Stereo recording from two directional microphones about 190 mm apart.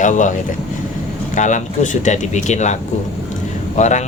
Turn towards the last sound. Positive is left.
turn(degrees=40)  # may be behind; listen again after turning